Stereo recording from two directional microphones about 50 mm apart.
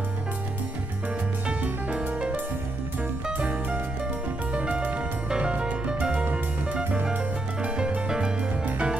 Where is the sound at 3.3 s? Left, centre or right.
Right.